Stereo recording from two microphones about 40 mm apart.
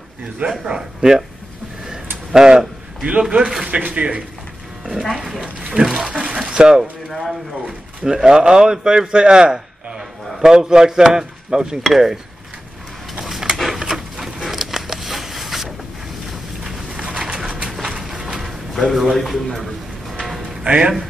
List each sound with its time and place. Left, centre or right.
0.7 s speech: centre
2.3 s speech: centre
3.6 s speech: right
4.8 s speech: centre
5.6 s a sound: centre
6.0 s speech: right
7.1 s speech: centre
7.6 s a man's voice: centre
13.2 s a sound: centre
17.3 s pigeon: centre
17.8 s a sound: centre
18.4 s a sound: centre
20.6 s speech: right